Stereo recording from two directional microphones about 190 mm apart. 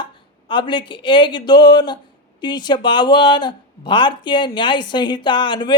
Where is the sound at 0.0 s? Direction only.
25° left (ahead or behind).